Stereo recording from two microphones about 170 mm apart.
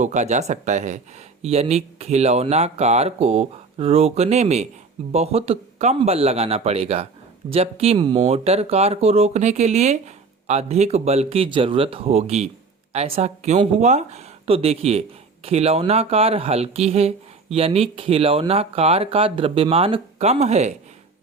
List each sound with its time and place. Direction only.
0.0 s speech: 45° right (ahead or behind)